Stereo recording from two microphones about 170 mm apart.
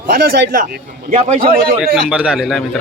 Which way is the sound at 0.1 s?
60° right (ahead or behind).